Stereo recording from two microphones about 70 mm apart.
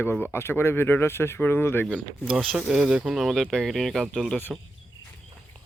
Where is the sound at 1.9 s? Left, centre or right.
Centre.